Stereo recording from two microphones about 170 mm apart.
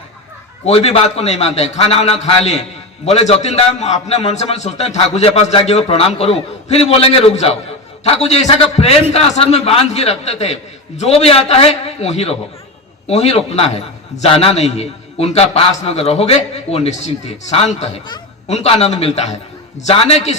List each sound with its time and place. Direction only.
0.6 s a man's voice: 40° left (ahead or behind)